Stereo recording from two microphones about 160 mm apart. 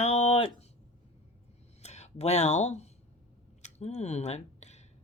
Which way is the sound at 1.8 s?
40° left (ahead or behind).